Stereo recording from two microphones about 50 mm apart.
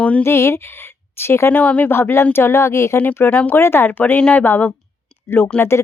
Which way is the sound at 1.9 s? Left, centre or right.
Left.